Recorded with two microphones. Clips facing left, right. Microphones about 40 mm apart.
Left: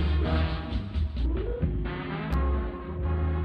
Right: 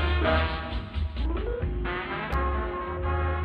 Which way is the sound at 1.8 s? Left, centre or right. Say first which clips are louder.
Right 3 dB; right.